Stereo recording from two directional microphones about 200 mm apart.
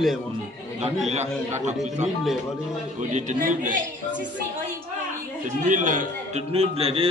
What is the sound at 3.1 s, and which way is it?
Speech, 40° right (ahead or behind).